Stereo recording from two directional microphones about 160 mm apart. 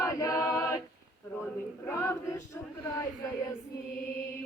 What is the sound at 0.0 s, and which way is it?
A capella, 20° left (ahead or behind).